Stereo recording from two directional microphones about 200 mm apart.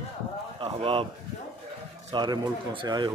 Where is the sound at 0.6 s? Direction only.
30° right (ahead or behind).